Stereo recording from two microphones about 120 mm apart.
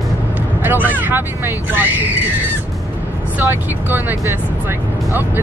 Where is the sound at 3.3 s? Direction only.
15° right (ahead or behind).